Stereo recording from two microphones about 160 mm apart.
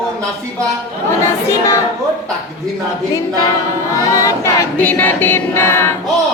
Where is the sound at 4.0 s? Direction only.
20° left (ahead or behind).